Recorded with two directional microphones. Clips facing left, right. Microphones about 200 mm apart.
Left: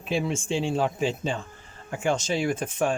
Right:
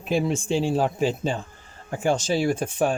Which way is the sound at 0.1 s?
40° right (ahead or behind).